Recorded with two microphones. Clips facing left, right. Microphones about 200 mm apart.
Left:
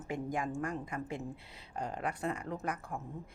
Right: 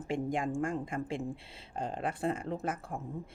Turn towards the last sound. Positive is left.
turn(degrees=-30)  # may be behind; listen again after turning